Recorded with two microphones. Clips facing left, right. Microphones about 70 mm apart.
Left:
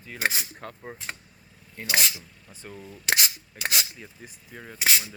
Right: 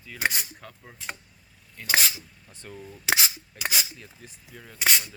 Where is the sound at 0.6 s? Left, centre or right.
Left.